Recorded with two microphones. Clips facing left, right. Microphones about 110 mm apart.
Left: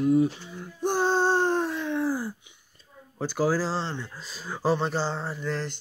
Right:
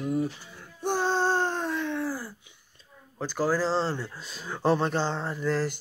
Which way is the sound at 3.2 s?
10° left (ahead or behind).